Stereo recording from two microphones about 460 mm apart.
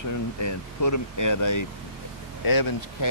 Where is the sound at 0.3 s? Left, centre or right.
Left.